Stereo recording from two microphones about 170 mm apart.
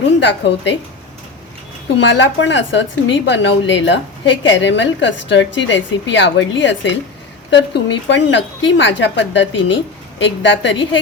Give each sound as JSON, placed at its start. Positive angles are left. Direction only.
{"t": 0.2, "sound": "a woman's voice", "side_deg": 90}
{"t": 2.0, "sound": "a woman's voice", "side_deg": 90}